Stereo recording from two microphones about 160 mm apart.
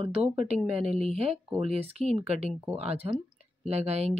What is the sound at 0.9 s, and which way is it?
Speech, 40° right (ahead or behind).